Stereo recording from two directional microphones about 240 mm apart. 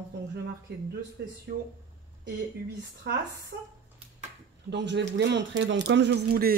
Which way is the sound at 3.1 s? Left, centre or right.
Right.